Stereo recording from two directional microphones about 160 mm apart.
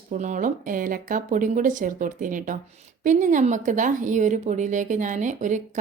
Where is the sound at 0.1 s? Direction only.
50° right (ahead or behind).